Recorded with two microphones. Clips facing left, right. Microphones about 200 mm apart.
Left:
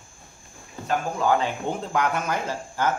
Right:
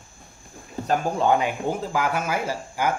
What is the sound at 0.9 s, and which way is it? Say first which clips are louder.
Speech: right 2 dB; 30° right (ahead or behind).